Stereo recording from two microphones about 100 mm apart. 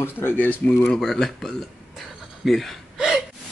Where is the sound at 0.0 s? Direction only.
20° left (ahead or behind).